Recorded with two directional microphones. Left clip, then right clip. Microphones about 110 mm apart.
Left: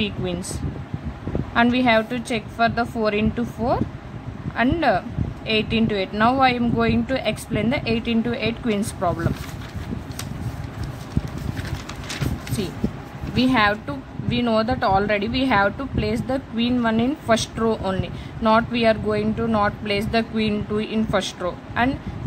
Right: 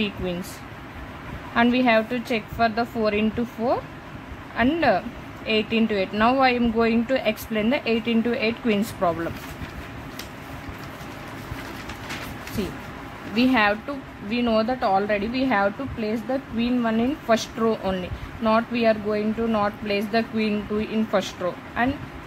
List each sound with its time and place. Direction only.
0.0 s a woman's voice: 10° right (ahead or behind)
1.5 s a woman's voice: 10° right (ahead or behind)
12.6 s a woman's voice: 15° right (ahead or behind)
13.8 s a woman's voice: 10° right (ahead or behind)